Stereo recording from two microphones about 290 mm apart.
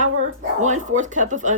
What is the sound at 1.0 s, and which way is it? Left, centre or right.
Speech, right.